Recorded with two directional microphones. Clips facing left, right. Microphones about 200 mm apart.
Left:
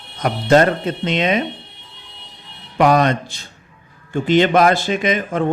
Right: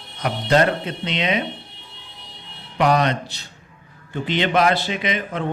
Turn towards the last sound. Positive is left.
turn(degrees=45)  # may be behind; listen again after turning